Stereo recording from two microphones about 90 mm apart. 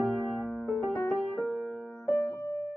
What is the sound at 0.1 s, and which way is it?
Music, centre (ahead or behind).